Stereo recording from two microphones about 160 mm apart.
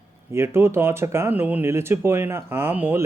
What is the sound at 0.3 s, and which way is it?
Speech, 15° right (ahead or behind).